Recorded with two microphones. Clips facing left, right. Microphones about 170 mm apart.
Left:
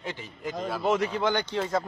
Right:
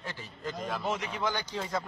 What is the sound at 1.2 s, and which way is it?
Speech, 60° left (ahead or behind).